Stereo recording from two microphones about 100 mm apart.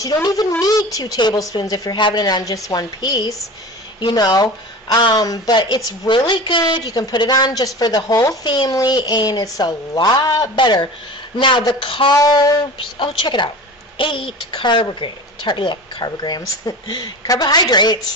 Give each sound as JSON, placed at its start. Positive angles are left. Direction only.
{"t": 0.0, "sound": "a woman's voice", "side_deg": 35}
{"t": 12.1, "sound": "a woman's voice", "side_deg": 35}
{"t": 13.0, "sound": "speech", "side_deg": 50}